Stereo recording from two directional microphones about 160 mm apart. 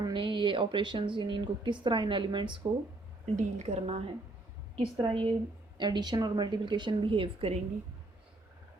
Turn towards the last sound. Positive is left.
turn(degrees=-35)  # may be behind; listen again after turning